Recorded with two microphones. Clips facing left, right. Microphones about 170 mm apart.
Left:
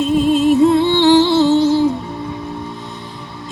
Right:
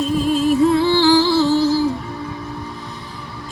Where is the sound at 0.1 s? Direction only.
25° left (ahead or behind).